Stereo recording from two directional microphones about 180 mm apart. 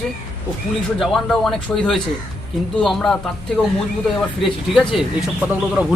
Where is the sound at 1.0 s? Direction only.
5° left (ahead or behind).